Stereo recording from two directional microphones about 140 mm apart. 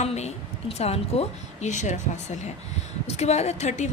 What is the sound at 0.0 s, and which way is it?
A woman's voice, 50° left (ahead or behind).